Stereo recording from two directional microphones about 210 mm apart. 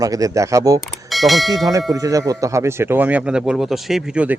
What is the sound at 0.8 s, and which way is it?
Speech, centre (ahead or behind).